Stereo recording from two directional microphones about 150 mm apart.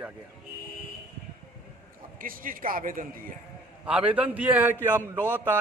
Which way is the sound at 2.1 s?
70° right (ahead or behind).